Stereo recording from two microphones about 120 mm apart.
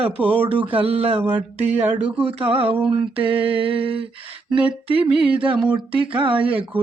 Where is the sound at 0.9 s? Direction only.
55° right (ahead or behind).